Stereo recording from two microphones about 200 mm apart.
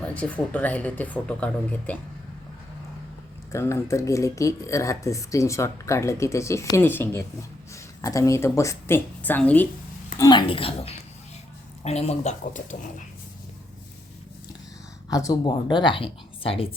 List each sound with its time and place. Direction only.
0.1 s speech: 5° left (ahead or behind)
3.5 s speech: 15° left (ahead or behind)
10.2 s speech: 20° left (ahead or behind)
15.1 s speech: 20° left (ahead or behind)